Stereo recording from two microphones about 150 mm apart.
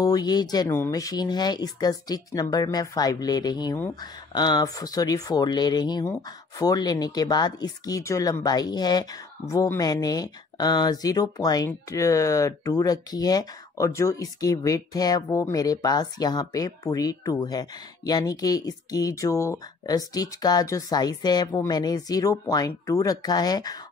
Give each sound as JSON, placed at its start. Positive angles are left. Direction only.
{"t": 0.0, "sound": "speech", "side_deg": 25}